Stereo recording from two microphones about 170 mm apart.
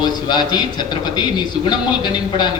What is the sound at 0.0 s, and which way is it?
A man's voice, 25° left (ahead or behind).